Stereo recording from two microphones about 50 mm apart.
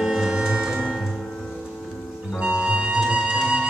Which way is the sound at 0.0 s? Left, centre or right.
Centre.